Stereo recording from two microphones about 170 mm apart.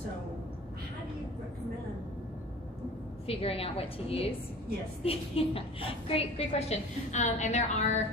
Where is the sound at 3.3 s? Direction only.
35° left (ahead or behind).